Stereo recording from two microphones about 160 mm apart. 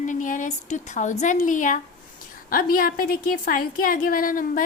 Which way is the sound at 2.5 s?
65° left (ahead or behind).